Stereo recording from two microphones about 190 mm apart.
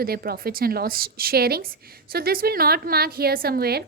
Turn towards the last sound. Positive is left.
turn(degrees=-55)  # may be behind; listen again after turning